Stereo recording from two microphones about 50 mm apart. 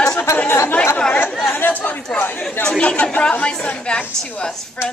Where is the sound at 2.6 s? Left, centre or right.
Centre.